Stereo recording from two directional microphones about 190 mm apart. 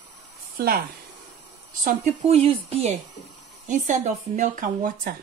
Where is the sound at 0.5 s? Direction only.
50° right (ahead or behind).